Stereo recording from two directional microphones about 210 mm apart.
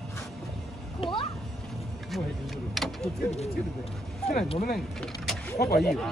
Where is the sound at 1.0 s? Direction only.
25° left (ahead or behind).